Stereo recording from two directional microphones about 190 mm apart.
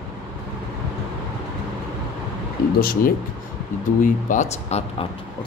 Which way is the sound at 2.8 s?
50° left (ahead or behind).